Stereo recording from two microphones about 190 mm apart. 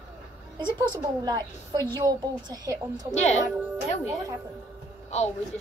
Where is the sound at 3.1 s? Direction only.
35° left (ahead or behind).